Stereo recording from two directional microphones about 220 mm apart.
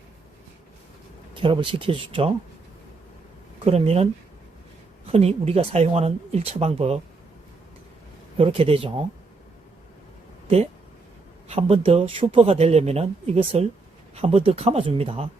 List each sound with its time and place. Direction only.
1.3 s speech: 20° right (ahead or behind)
3.7 s speech: 30° right (ahead or behind)
8.4 s speech: 25° right (ahead or behind)
11.4 s speech: 25° right (ahead or behind)